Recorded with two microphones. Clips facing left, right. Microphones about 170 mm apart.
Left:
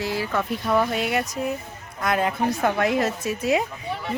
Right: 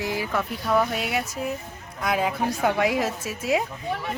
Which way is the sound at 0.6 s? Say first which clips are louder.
Left 1 dB; centre (ahead or behind).